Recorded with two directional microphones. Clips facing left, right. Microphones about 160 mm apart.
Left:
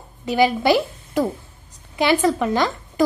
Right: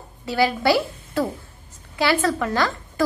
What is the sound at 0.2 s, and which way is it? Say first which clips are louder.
A woman's voice: left 3 dB; 20° left (ahead or behind).